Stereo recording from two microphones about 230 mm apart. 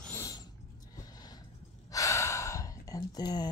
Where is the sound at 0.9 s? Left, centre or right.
Centre.